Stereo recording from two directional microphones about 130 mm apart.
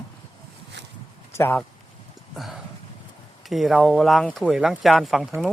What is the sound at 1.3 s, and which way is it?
Speech, 15° left (ahead or behind).